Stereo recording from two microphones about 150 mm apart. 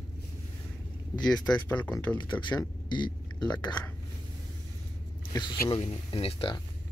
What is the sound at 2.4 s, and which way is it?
Speech, 30° left (ahead or behind).